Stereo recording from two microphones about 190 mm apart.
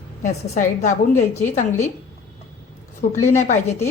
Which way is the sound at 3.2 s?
40° left (ahead or behind).